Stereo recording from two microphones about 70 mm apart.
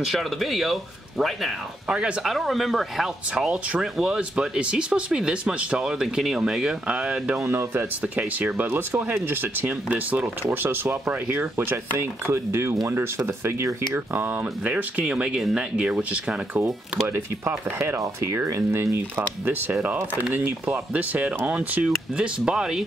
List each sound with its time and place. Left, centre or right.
0.0 s speech: centre
7.4 s speech: right
8.0 s speech: right
13.9 s speech: right
17.1 s speech: right
19.8 s speech: right
21.8 s speech: centre